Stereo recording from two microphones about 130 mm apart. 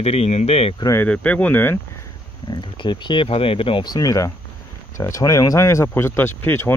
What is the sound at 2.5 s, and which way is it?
Speech, 35° left (ahead or behind).